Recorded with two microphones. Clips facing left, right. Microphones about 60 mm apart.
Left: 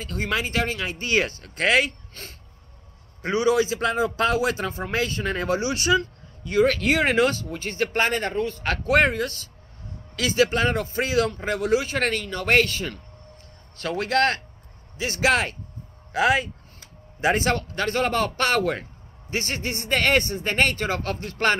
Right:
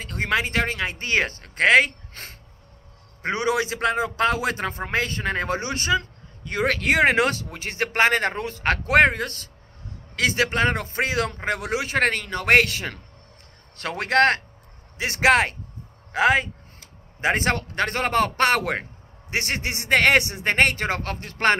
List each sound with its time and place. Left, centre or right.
0.4 s a man's voice: right
3.2 s a man's voice: right
8.6 s speech: right
16.1 s a man's voice: right
21.0 s a man's voice: right